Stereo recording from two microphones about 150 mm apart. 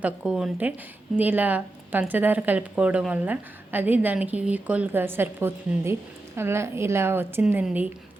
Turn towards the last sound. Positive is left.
turn(degrees=-10)  # may be behind; listen again after turning